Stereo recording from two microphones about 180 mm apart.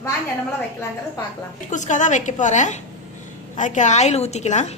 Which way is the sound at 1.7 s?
45° left (ahead or behind).